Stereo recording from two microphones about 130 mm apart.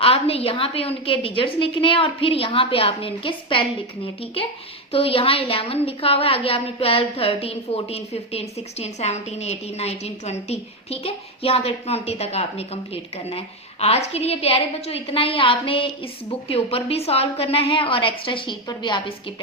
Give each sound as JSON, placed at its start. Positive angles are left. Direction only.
{"t": 0.0, "sound": "a woman's voice", "side_deg": 50}